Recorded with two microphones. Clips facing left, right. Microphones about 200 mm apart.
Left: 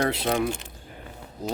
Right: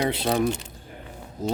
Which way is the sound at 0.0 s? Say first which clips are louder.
Right 1 dB; 25° right (ahead or behind).